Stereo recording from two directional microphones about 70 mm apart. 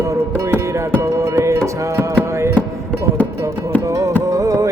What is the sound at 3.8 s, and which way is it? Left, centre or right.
Music, right.